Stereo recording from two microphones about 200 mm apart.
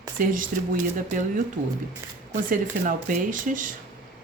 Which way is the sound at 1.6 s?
35° right (ahead or behind).